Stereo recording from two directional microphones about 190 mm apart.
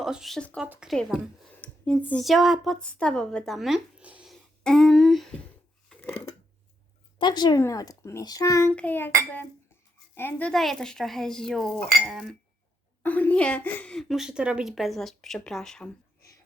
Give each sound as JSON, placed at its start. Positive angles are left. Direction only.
{"t": 0.0, "sound": "a woman's voice", "side_deg": 0}
{"t": 5.9, "sound": "a sound", "side_deg": 5}
{"t": 7.2, "sound": "a child's voice", "side_deg": 20}